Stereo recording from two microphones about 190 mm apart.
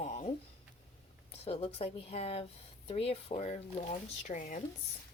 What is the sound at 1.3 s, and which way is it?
Speech, 30° left (ahead or behind).